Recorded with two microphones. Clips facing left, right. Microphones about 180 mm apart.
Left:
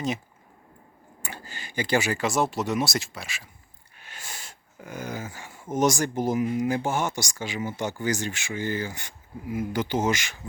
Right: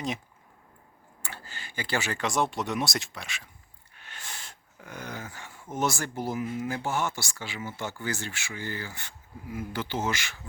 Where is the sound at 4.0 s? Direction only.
10° left (ahead or behind).